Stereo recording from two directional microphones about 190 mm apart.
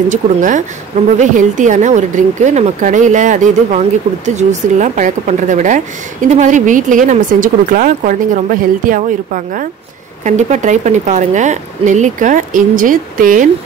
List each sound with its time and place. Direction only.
0.1 s speech: 40° right (ahead or behind)